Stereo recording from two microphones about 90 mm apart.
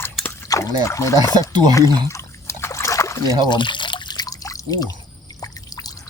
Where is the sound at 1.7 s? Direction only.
35° left (ahead or behind).